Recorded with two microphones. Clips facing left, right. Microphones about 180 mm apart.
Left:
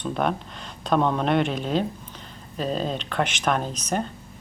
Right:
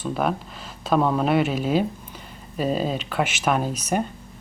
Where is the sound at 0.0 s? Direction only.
5° right (ahead or behind).